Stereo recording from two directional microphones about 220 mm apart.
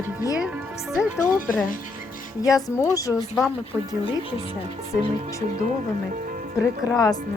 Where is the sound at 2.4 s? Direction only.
15° left (ahead or behind).